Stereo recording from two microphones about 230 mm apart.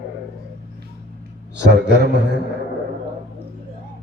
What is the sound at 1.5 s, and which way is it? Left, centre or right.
Speech, right.